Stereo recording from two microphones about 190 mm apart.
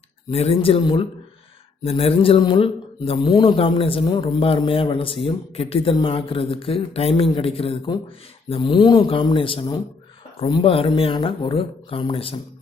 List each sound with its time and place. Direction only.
0.3 s speech: 30° left (ahead or behind)